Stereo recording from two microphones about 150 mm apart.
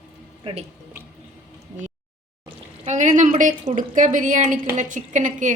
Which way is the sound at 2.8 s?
55° right (ahead or behind).